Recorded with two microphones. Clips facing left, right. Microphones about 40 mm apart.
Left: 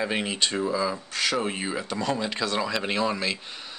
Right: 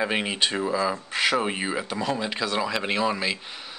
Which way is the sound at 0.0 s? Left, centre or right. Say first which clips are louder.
Right 2 dB; centre.